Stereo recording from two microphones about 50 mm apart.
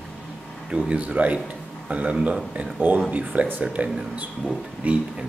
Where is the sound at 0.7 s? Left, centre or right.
Right.